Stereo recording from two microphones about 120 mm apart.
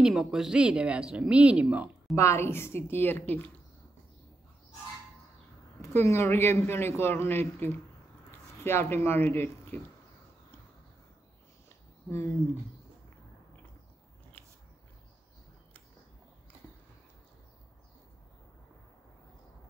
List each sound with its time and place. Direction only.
0.0 s speech: 5° right (ahead or behind)
2.1 s speech: 20° left (ahead or behind)
5.8 s speech: 25° left (ahead or behind)